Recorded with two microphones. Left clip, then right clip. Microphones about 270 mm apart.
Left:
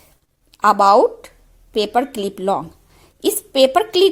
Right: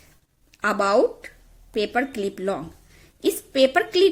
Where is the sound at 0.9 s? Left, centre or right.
Centre.